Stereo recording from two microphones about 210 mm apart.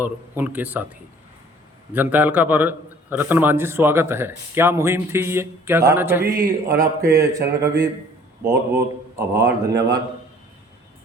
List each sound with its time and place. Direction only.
0.0 s a man's voice: 10° right (ahead or behind)
1.9 s a man's voice: 10° right (ahead or behind)
6.2 s speech: 45° right (ahead or behind)
6.7 s a man's voice: 15° right (ahead or behind)
9.3 s speech: 50° right (ahead or behind)